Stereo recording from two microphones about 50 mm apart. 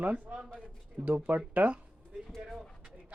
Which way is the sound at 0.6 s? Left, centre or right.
Right.